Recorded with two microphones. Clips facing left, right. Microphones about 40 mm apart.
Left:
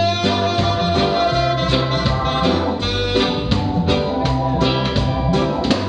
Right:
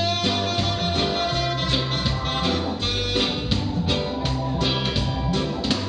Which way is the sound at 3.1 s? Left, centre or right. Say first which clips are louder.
Left 7 dB; centre.